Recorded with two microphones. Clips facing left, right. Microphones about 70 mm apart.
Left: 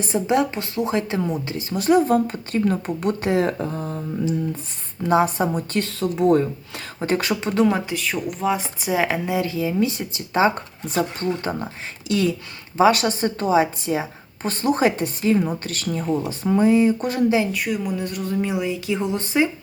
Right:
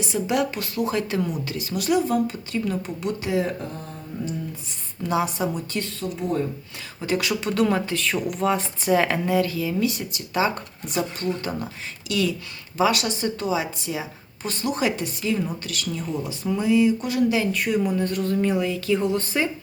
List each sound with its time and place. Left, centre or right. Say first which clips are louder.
0.3 s speech: left 4 dB; left
5.0 s a woman's voice: left 5 dB; left
5.8 s speech: left 9 dB; left
7.0 s a woman's voice: left 2 dB; left
7.5 s a woman's voice: left 2 dB; centre; by 17.4 s left
17.5 s speech: right 2 dB; centre